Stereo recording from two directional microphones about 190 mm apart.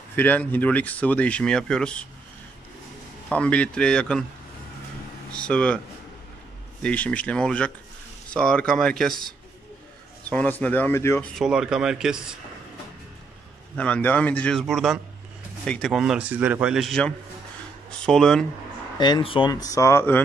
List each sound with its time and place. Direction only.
0.1 s speech: 10° left (ahead or behind)
3.3 s a man's voice: 5° left (ahead or behind)
5.3 s speech: 5° left (ahead or behind)
6.8 s a man's voice: 5° left (ahead or behind)
10.3 s speech: 10° left (ahead or behind)
11.3 s a man's voice: 5° right (ahead or behind)
13.7 s a man's voice: 5° left (ahead or behind)
18.9 s speech: 20° left (ahead or behind)